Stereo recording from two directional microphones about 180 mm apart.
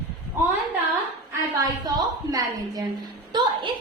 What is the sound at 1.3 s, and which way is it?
A woman's voice, 20° right (ahead or behind).